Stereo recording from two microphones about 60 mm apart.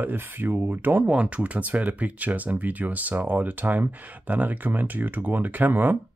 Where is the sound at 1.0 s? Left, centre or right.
Right.